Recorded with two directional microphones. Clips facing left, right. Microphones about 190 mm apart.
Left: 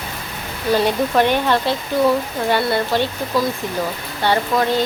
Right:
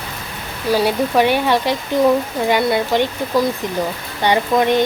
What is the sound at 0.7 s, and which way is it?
Speech, 10° right (ahead or behind).